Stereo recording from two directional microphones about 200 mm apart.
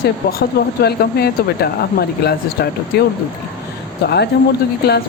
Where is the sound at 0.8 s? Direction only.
55° left (ahead or behind).